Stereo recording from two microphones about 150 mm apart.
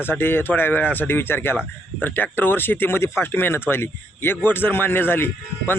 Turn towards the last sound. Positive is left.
turn(degrees=15)  # may be behind; listen again after turning